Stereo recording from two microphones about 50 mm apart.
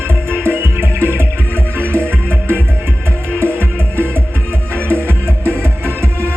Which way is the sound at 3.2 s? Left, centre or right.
Right.